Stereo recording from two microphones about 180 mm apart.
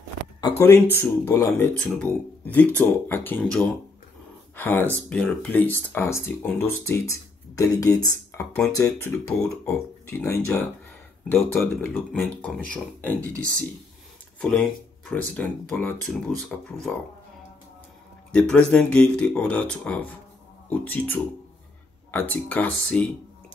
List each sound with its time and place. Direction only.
0.4 s speech: 20° left (ahead or behind)
14.4 s speech: 5° left (ahead or behind)
18.3 s speech: 5° left (ahead or behind)